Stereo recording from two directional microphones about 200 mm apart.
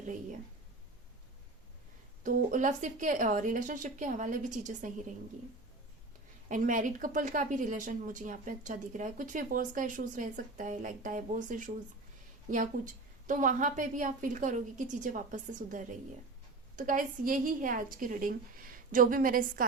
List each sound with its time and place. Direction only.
2.2 s speech: 40° right (ahead or behind)
6.5 s a woman's voice: 40° right (ahead or behind)